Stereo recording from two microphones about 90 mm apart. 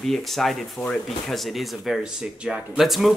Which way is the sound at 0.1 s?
5° left (ahead or behind).